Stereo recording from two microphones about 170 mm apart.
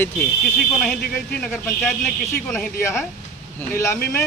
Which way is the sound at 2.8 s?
15° left (ahead or behind).